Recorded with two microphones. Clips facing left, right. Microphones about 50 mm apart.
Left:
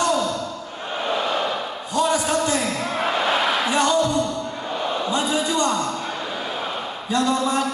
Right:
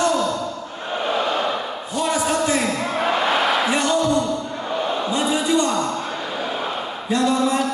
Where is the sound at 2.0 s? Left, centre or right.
Centre.